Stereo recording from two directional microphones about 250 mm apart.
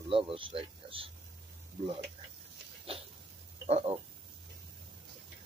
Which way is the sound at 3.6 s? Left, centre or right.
Right.